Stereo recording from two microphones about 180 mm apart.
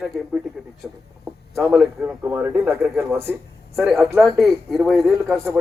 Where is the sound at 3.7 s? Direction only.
Centre (ahead or behind).